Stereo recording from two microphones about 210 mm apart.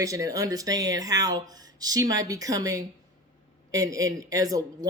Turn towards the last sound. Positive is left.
turn(degrees=-15)  # may be behind; listen again after turning